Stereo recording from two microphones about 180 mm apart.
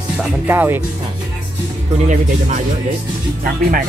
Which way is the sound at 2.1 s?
45° right (ahead or behind).